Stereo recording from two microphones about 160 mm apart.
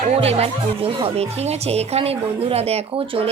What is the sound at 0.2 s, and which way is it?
Speech, 40° right (ahead or behind).